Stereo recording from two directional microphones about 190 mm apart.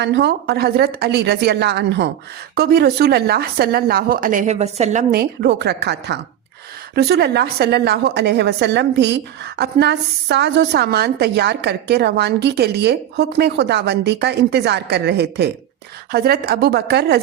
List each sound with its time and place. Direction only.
0.0 s a woman's voice: 65° right (ahead or behind); by 5.0 s 35° right (ahead or behind)
5.1 s a woman's voice: 55° right (ahead or behind)